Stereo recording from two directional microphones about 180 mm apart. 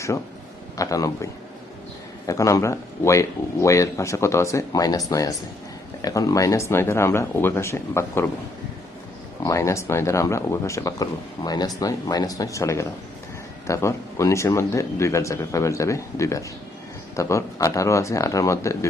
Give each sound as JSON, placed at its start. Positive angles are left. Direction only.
{"t": 0.8, "sound": "speech", "side_deg": 20}
{"t": 9.4, "sound": "speech", "side_deg": 15}